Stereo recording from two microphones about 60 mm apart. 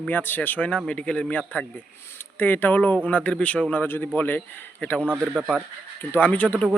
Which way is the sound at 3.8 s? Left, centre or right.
Left.